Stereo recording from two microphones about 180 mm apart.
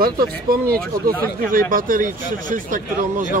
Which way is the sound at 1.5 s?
50° right (ahead or behind).